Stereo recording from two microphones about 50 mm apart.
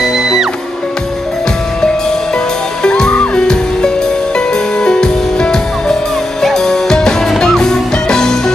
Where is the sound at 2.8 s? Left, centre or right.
Centre.